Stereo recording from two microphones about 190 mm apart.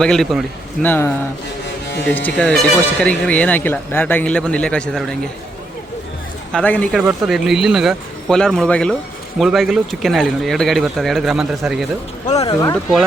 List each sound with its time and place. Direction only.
0.0 s speech: 5° left (ahead or behind)
6.5 s speech: 5° left (ahead or behind)
12.5 s speech: 15° left (ahead or behind)